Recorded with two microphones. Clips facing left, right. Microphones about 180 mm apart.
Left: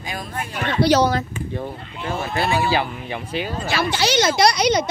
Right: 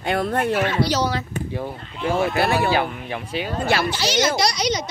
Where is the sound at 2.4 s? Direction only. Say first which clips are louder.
Left 3 dB; 60° right (ahead or behind).